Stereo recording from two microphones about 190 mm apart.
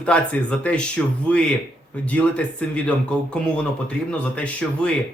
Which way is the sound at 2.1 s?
5° left (ahead or behind).